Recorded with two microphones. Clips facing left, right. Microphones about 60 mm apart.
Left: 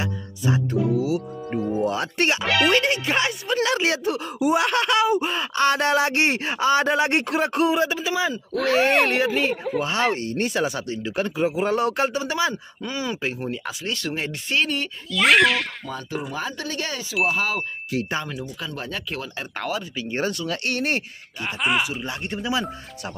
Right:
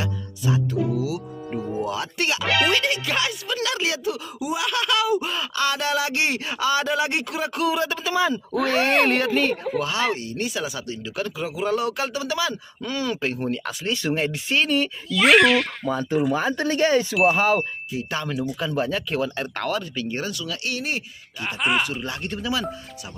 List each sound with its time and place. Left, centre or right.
0.0 s speech: left
2.4 s speech: centre
2.7 s speech: left
8.0 s speech: centre
8.5 s speech: centre
9.8 s speech: left
12.8 s speech: centre
16.3 s speech: right
16.5 s speech: right
18.6 s speech: centre
20.1 s speech: left
21.5 s speech: centre
22.0 s speech: left